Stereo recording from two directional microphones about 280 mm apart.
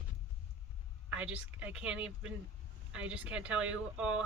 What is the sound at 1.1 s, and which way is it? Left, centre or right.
Speech, centre.